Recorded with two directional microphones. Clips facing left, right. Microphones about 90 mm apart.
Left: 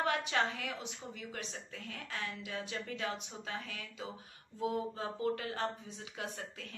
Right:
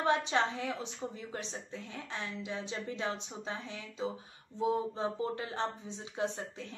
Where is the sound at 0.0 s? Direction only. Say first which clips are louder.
Right 3 dB; 25° right (ahead or behind).